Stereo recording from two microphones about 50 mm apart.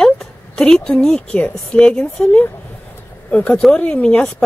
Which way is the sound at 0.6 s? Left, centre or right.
Centre.